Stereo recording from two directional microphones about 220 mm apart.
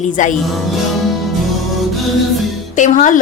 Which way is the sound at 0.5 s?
Centre (ahead or behind).